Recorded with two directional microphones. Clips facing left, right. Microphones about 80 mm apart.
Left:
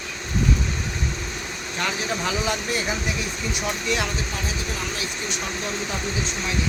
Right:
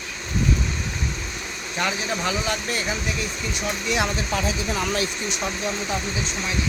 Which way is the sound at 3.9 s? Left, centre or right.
Centre.